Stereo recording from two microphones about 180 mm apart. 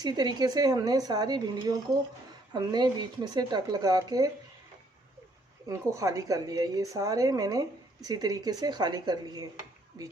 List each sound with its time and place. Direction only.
0.0 s a woman's voice: 25° right (ahead or behind)
5.6 s a woman's voice: 15° right (ahead or behind)